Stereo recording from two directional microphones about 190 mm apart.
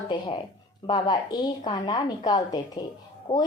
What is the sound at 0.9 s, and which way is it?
A woman's voice, 25° left (ahead or behind).